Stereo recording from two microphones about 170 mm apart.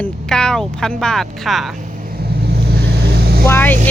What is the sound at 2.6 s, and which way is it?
Vehicle, 70° right (ahead or behind).